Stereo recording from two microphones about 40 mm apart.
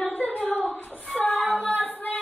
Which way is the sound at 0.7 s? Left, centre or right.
Left.